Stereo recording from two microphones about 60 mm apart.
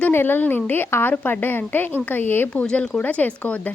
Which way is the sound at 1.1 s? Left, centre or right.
Left.